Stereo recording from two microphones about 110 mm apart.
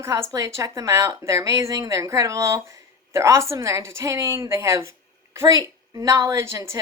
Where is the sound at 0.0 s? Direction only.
25° right (ahead or behind).